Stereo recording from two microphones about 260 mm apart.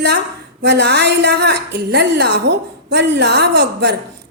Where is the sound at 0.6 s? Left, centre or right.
Right.